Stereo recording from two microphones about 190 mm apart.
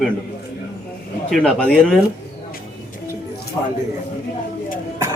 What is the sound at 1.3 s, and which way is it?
Speech, 5° left (ahead or behind).